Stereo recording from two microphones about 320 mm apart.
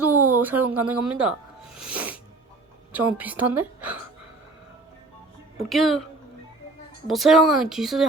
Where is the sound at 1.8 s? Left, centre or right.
Centre.